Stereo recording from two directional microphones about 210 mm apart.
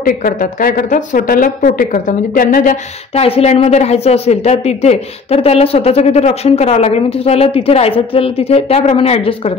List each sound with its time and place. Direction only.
0.0 s speech: 40° left (ahead or behind)
3.3 s a woman's voice: 30° left (ahead or behind)